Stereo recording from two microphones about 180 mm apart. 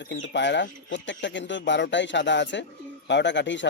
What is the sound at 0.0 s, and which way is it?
Speech, 85° left.